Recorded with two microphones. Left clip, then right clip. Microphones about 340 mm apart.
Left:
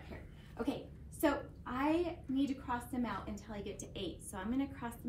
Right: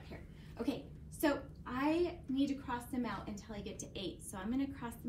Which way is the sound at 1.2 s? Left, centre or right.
Centre.